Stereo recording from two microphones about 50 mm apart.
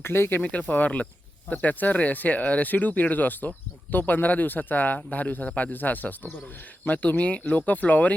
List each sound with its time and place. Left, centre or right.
0.0 s speech: left
0.4 s speech: left